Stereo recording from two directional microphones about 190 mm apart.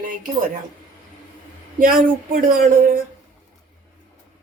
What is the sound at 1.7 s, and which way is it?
Speech, 45° right (ahead or behind).